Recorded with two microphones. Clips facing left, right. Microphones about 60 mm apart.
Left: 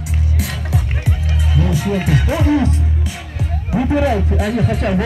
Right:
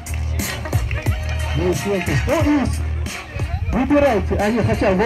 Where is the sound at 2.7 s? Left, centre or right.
Right.